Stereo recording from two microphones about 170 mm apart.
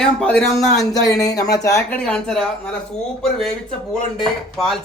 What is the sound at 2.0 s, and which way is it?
Speech, 5° left (ahead or behind).